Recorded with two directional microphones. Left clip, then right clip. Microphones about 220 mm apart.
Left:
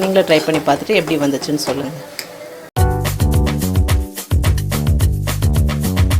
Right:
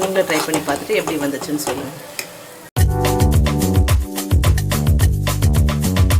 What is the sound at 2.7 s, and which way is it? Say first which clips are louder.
Music: right 1 dB; centre (ahead or behind).